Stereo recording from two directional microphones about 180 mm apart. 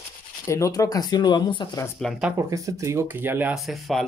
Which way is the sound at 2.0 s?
Centre (ahead or behind).